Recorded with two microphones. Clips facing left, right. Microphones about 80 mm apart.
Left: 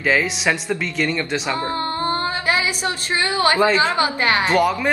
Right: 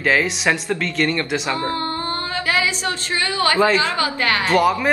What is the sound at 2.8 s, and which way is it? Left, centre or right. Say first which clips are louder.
A woman's voice: left 1 dB; left.